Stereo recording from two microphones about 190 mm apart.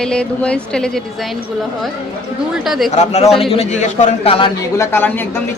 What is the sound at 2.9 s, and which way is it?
Speech, 35° left (ahead or behind).